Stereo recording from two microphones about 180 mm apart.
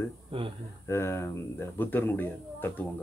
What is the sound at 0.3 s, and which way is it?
Speech, 30° right (ahead or behind).